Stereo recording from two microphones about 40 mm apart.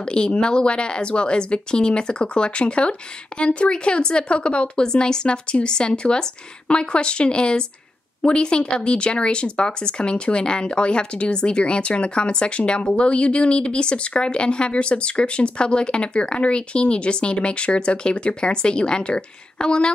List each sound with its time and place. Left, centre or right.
0.0 s speech: left